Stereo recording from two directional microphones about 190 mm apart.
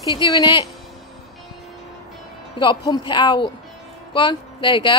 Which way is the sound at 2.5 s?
20° left (ahead or behind).